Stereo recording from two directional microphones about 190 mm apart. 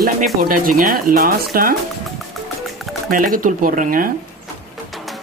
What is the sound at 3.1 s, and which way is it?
Speech, 45° right (ahead or behind).